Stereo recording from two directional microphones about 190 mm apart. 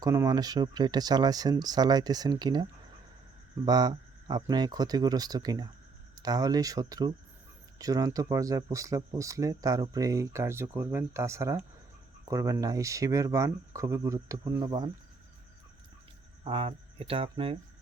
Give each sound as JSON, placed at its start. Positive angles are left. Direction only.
{"t": 0.0, "sound": "speech", "side_deg": -15}
{"t": 3.7, "sound": "speech", "side_deg": -20}
{"t": 16.4, "sound": "speech", "side_deg": -30}